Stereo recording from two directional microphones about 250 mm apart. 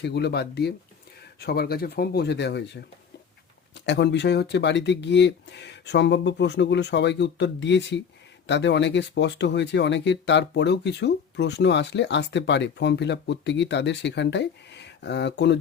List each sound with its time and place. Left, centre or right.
0.0 s speech: left
3.8 s speech: left